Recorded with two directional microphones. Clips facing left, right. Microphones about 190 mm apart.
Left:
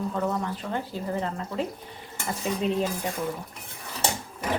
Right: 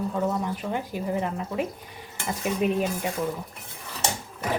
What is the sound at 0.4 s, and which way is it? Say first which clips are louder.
A woman's voice: right 2 dB; 15° right (ahead or behind).